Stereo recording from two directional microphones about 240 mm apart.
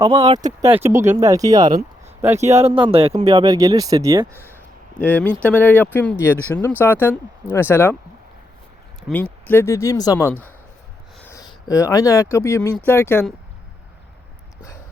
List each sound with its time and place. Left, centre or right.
0.0 s speech: right
2.5 s speech: right
4.9 s speech: centre
9.0 s speech: centre